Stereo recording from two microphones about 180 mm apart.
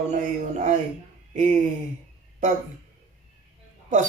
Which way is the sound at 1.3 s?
45° right (ahead or behind).